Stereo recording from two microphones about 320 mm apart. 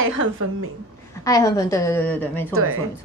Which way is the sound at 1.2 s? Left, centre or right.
Centre.